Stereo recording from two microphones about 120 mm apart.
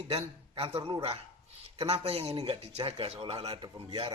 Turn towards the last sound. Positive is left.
turn(degrees=-40)  # may be behind; listen again after turning